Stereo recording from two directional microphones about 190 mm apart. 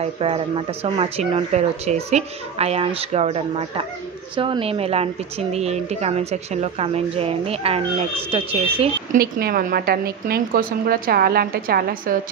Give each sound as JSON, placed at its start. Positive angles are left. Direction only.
{"t": 0.0, "sound": "speech", "side_deg": -30}
{"t": 9.1, "sound": "a woman's voice", "side_deg": -50}